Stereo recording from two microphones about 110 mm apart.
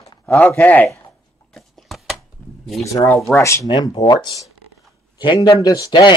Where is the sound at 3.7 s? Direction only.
40° left (ahead or behind).